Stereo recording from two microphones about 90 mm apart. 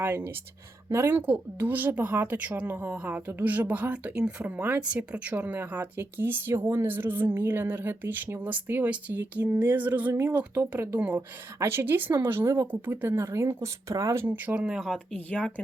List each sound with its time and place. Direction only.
0.0 s speech: 25° right (ahead or behind)
14.8 s speech: 5° left (ahead or behind)